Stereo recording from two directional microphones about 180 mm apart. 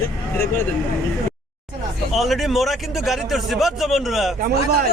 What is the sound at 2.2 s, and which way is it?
A man's voice, centre (ahead or behind).